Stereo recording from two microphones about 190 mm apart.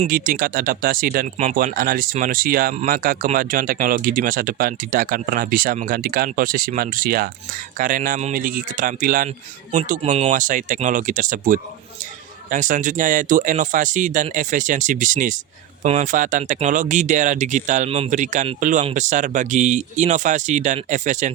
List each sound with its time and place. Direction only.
0.1 s speech: 50° right (ahead or behind); by 10.3 s 30° right (ahead or behind)
10.3 s speech: 45° right (ahead or behind)